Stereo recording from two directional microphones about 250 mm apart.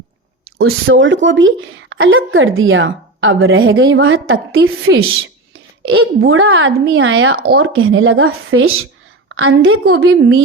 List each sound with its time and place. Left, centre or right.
0.6 s a woman's voice: right